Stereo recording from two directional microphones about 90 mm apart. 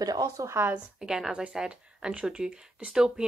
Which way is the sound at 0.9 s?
5° right (ahead or behind).